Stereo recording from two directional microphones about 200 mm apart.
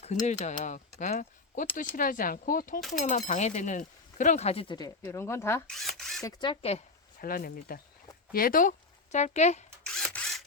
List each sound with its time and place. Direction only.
0.0 s speech: 35° left (ahead or behind)
5.0 s speech: 15° left (ahead or behind)
5.7 s speech: centre (ahead or behind)
6.2 s speech: 25° left (ahead or behind)
7.2 s speech: 45° left (ahead or behind)
9.8 s a sound: 5° left (ahead or behind)